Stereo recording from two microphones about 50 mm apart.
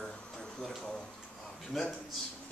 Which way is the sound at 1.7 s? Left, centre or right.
Centre.